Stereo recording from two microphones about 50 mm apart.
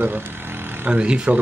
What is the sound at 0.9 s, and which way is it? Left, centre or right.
Speech, right.